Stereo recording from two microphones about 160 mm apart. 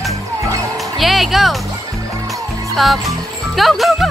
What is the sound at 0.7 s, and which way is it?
Music, centre (ahead or behind).